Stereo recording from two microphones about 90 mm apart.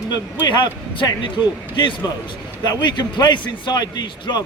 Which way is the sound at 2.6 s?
50° left (ahead or behind).